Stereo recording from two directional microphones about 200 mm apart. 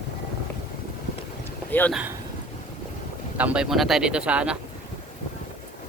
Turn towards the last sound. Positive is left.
turn(degrees=-5)  # may be behind; listen again after turning